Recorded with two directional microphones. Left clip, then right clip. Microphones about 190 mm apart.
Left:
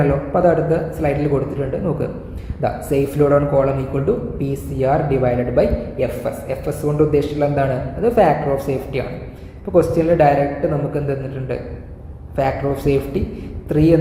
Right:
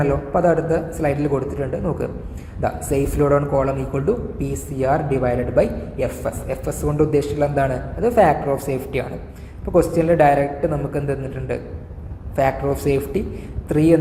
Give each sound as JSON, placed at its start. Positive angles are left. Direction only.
{"t": 0.0, "sound": "a man's voice", "side_deg": -30}